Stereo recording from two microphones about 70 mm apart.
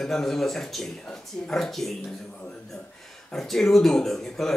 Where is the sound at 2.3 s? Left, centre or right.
Left.